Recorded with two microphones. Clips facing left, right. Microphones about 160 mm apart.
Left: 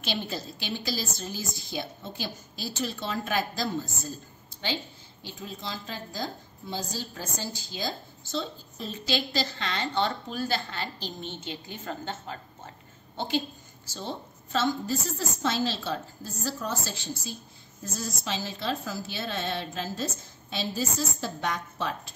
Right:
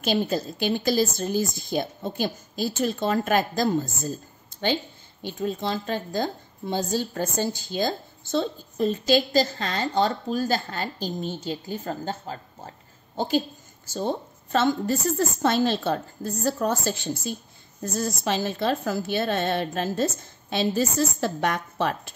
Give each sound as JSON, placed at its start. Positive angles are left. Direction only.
{"t": 0.0, "sound": "a woman's voice", "side_deg": -45}
{"t": 5.2, "sound": "a woman's voice", "side_deg": -55}